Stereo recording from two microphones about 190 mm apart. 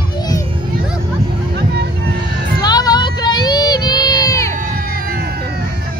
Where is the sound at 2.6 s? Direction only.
20° left (ahead or behind).